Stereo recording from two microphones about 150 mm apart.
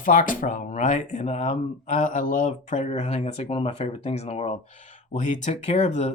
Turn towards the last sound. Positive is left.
turn(degrees=50)  # may be behind; listen again after turning